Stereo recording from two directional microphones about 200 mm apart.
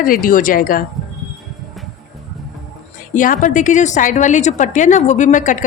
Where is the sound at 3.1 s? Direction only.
40° left (ahead or behind).